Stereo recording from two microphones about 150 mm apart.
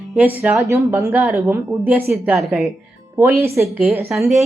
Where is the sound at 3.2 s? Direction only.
15° right (ahead or behind).